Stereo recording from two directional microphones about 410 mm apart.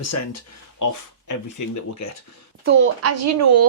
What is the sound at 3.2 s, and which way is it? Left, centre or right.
Speech, right.